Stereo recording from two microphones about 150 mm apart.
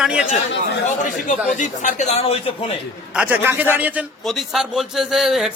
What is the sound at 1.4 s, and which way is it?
Speech, 55° left (ahead or behind).